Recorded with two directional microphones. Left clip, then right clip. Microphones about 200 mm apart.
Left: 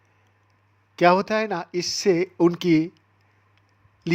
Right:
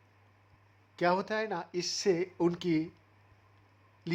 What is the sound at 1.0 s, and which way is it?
Speech, 30° left (ahead or behind).